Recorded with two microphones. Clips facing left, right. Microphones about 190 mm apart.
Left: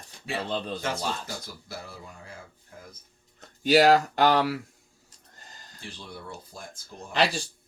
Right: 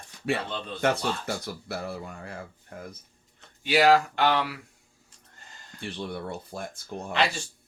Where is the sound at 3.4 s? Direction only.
40° left (ahead or behind).